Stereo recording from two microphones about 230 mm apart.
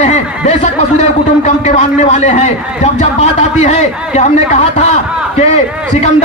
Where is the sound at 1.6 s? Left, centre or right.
Left.